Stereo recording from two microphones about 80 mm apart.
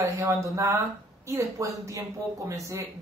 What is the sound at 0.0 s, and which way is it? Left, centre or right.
Speech, right.